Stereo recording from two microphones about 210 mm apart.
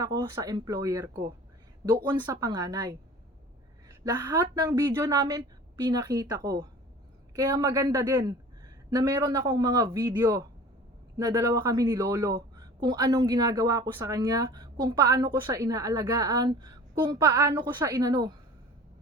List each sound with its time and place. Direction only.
0.0 s speech: 20° right (ahead or behind)
4.0 s speech: 15° right (ahead or behind)